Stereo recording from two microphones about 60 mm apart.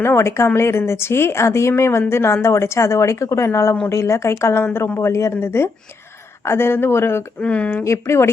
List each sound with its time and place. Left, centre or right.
0.0 s speech: left
7.4 s speech: left
7.9 s speech: left